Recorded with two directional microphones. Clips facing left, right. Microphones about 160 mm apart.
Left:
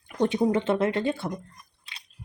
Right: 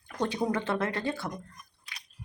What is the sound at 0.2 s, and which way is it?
Speech, 20° left (ahead or behind).